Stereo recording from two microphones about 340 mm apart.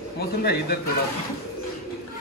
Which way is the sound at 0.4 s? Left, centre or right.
Left.